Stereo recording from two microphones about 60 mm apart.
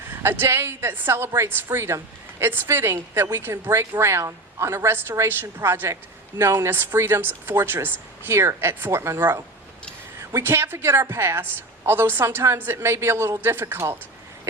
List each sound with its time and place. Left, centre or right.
0.2 s a woman's voice: right
6.4 s a woman's voice: right
6.7 s speech: right
10.4 s a woman's voice: right
12.3 s a woman's voice: right